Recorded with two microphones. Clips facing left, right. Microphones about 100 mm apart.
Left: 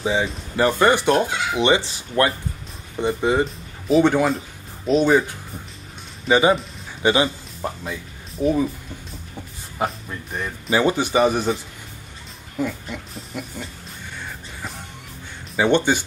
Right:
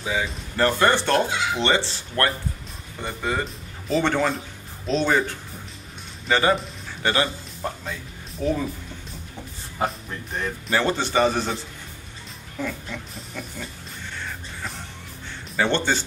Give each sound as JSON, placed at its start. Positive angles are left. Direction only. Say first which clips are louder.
{"t": 0.0, "sound": "speech", "louder": "left 5 dB", "side_deg": 25}
{"t": 0.6, "sound": "speech", "louder": "left 2 dB", "side_deg": 10}
{"t": 6.2, "sound": "speech", "louder": "left 4 dB", "side_deg": 15}
{"t": 9.8, "sound": "speech", "louder": "left 1 dB", "side_deg": 5}
{"t": 12.5, "sound": "speech", "louder": "left 4 dB", "side_deg": 15}
{"t": 15.5, "sound": "speech", "louder": "left 4 dB", "side_deg": 15}